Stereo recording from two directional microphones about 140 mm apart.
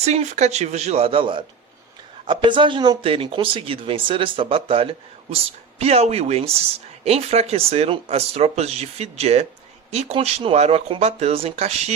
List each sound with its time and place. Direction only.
0.0 s speech: 50° right (ahead or behind)